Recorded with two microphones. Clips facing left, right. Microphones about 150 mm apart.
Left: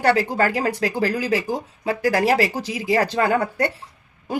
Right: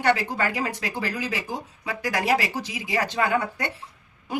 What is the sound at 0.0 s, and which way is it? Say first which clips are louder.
Speech: left 5 dB; 35° left (ahead or behind).